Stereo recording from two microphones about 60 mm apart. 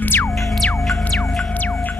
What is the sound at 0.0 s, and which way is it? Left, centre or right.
Music, left.